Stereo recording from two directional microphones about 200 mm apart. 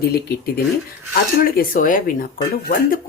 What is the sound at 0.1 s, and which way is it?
Speech, 50° left (ahead or behind).